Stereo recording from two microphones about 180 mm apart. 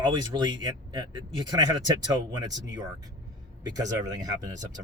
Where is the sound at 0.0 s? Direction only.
25° right (ahead or behind).